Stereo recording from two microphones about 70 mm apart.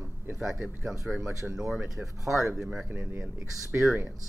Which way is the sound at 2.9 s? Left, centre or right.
Right.